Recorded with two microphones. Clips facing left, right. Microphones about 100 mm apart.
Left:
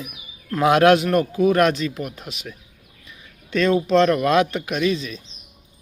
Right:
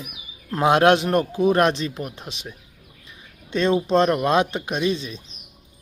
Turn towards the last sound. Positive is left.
turn(degrees=-30)  # may be behind; listen again after turning